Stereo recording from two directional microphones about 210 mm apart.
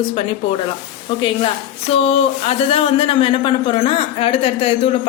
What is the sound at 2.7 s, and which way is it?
A woman's voice, 25° left (ahead or behind).